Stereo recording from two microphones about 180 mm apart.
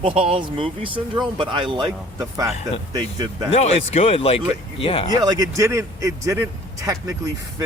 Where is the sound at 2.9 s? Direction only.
25° right (ahead or behind).